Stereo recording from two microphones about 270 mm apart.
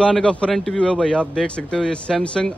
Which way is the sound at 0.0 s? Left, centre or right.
Centre.